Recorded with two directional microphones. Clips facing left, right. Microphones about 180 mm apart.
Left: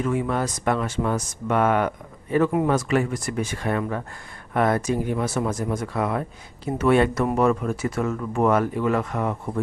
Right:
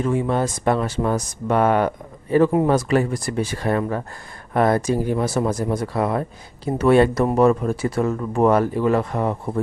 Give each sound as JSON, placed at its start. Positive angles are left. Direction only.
{"t": 0.0, "sound": "speech", "side_deg": -30}